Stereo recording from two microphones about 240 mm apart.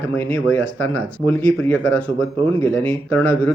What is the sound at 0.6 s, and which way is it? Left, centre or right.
Speech, left.